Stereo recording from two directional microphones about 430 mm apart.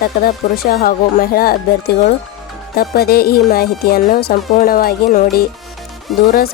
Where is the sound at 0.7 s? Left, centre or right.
Left.